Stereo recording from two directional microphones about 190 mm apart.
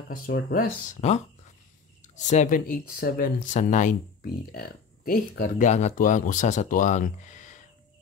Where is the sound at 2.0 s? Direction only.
40° left (ahead or behind).